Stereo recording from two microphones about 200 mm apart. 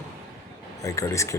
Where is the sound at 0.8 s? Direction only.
15° left (ahead or behind).